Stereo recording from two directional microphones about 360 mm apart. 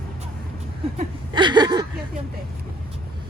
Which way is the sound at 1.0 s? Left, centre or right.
Centre.